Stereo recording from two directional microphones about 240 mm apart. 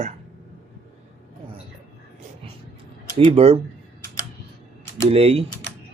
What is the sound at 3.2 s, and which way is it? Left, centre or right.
Speech, right.